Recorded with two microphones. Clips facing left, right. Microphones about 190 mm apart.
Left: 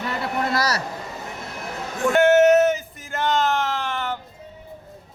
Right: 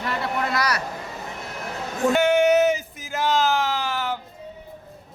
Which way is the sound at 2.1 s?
Centre (ahead or behind).